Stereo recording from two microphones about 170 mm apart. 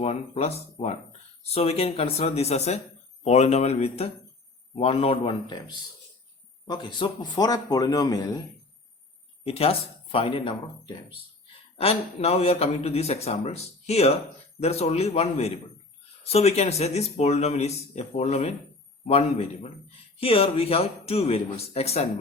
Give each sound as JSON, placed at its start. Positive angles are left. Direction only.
{"t": 0.0, "sound": "a man's voice", "side_deg": 35}
{"t": 9.4, "sound": "speech", "side_deg": 35}